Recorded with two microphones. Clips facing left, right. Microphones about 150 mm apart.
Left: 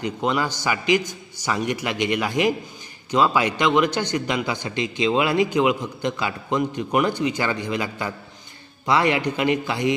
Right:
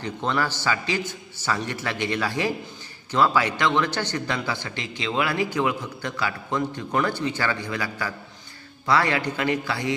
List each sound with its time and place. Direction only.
0.0 s a man's voice: 15° left (ahead or behind)